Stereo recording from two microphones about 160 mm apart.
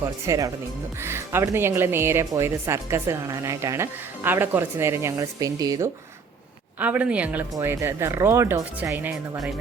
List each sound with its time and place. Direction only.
0.3 s speech: 20° right (ahead or behind)
6.7 s speech: 10° right (ahead or behind)